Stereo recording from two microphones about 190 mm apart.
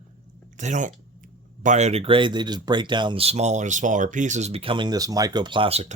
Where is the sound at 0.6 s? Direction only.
40° right (ahead or behind).